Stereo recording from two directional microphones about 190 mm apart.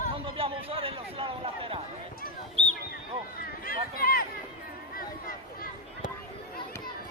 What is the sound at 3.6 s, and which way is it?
Speech, 50° left (ahead or behind).